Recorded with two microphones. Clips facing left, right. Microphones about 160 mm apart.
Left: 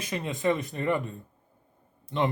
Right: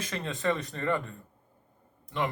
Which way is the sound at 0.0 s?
15° left (ahead or behind).